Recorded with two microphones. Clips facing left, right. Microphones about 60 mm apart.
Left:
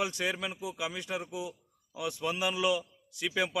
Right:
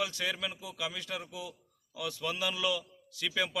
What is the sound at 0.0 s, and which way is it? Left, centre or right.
A man's voice, left.